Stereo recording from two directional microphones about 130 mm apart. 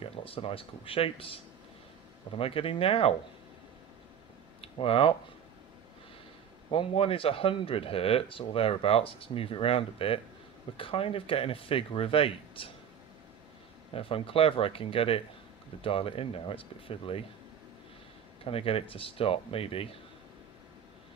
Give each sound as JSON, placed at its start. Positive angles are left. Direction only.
{"t": 0.0, "sound": "speech", "side_deg": 45}
{"t": 4.6, "sound": "speech", "side_deg": 45}
{"t": 6.7, "sound": "speech", "side_deg": 45}
{"t": 13.9, "sound": "speech", "side_deg": 45}
{"t": 18.4, "sound": "speech", "side_deg": 45}